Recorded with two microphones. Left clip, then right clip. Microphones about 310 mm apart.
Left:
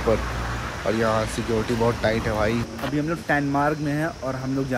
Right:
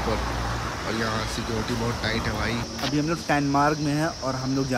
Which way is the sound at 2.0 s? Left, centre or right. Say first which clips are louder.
Left 5 dB; centre.